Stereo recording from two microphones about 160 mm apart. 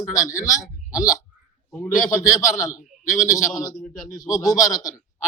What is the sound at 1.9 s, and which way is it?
Speech, 55° left (ahead or behind).